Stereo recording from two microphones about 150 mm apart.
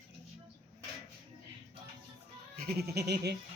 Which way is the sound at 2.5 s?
90° right.